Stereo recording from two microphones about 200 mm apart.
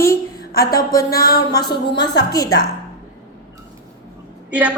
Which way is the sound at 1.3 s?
20° left (ahead or behind).